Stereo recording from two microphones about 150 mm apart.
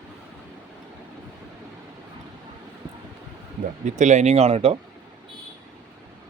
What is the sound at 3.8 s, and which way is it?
Speech, 50° right (ahead or behind).